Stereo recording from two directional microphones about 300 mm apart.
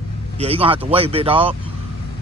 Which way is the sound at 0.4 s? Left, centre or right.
Centre.